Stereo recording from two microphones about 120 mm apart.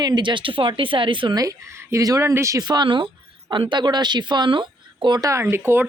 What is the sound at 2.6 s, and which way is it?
A woman's voice, 40° right (ahead or behind).